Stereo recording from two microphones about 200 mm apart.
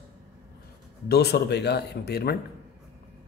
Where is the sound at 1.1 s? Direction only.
55° left (ahead or behind).